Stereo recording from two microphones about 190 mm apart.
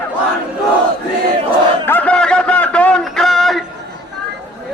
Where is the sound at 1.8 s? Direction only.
10° left (ahead or behind).